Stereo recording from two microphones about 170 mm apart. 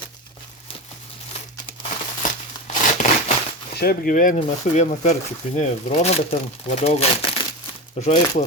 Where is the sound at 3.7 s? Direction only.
65° left (ahead or behind); by 8.4 s 40° left (ahead or behind).